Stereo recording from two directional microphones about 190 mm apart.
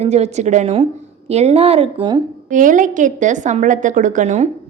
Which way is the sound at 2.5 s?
45° right (ahead or behind).